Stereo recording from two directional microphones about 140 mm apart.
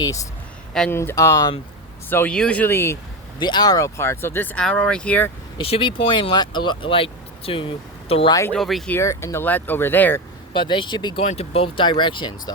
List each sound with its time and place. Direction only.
0.9 s speech: 15° left (ahead or behind)
2.0 s speech: 10° left (ahead or behind)
3.3 s speech: 30° left (ahead or behind); by 5.3 s 10° left (ahead or behind)
5.5 s speech: 40° left (ahead or behind)
8.3 s speech: 20° left (ahead or behind)
8.5 s speech: centre (ahead or behind)
8.9 s speech: 20° left (ahead or behind)
10.5 s speech: 35° left (ahead or behind)
11.2 s speech: 45° left (ahead or behind)